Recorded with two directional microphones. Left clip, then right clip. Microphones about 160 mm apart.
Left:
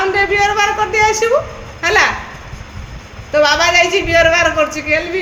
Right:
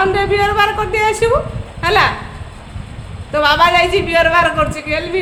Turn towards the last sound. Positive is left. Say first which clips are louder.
# left 2 dB
turn(degrees=-5)  # may be behind; listen again after turning